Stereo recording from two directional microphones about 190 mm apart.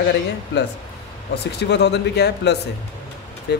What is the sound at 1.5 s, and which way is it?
Speech, 65° left (ahead or behind).